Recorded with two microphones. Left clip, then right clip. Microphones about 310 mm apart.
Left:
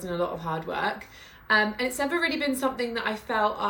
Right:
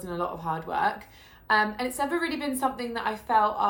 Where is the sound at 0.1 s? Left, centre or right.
Right.